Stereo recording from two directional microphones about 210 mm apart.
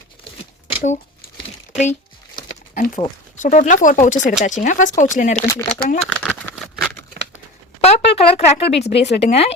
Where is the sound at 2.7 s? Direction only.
40° left (ahead or behind).